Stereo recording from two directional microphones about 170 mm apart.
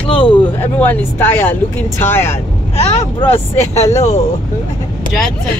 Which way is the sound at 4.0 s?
40° left (ahead or behind).